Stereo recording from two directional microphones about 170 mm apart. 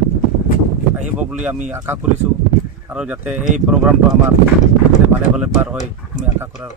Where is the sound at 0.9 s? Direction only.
5° right (ahead or behind).